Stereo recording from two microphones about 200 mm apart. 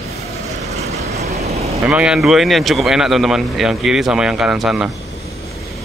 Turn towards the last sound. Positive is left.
turn(degrees=-5)  # may be behind; listen again after turning